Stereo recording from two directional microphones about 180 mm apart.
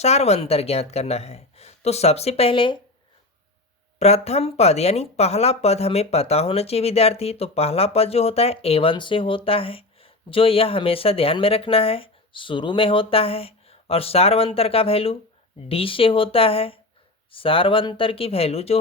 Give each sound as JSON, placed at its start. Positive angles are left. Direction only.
{"t": 0.0, "sound": "speech", "side_deg": 35}
{"t": 3.9, "sound": "speech", "side_deg": 35}